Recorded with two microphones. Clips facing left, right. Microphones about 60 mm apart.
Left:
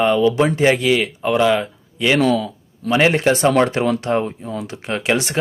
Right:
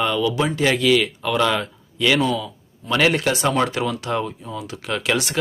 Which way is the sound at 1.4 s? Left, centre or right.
Centre.